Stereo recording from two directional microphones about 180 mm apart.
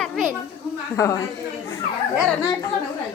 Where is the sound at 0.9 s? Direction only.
15° left (ahead or behind).